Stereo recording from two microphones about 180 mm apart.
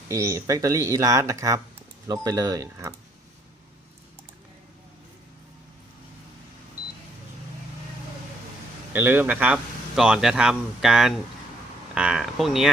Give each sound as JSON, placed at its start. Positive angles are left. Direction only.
{"t": 0.1, "sound": "speech", "side_deg": -15}
{"t": 8.9, "sound": "speech", "side_deg": -10}